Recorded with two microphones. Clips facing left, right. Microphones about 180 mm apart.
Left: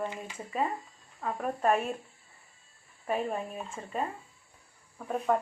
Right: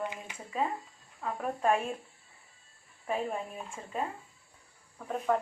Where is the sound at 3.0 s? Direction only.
5° left (ahead or behind).